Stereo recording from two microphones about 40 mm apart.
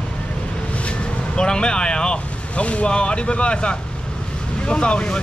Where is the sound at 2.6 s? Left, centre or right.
Left.